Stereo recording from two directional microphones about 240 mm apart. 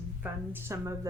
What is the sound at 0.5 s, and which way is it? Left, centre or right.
Speech, centre.